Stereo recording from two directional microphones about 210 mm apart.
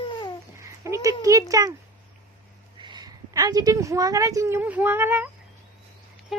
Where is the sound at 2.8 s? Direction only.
20° right (ahead or behind).